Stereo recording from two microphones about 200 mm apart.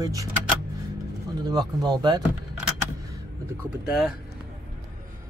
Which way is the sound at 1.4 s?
20° right (ahead or behind).